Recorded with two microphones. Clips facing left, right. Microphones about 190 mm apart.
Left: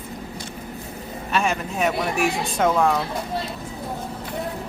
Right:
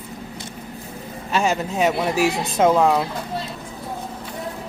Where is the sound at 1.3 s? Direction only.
30° right (ahead or behind).